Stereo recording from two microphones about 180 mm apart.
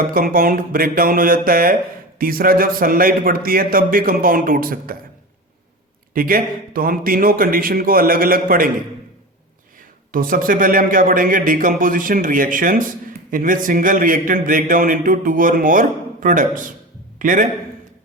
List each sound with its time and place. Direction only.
0.1 s a man's voice: 50° right (ahead or behind)
6.1 s a man's voice: 55° right (ahead or behind)
10.1 s a man's voice: 50° right (ahead or behind)